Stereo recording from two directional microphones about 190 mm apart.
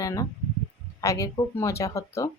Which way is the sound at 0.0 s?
20° left (ahead or behind).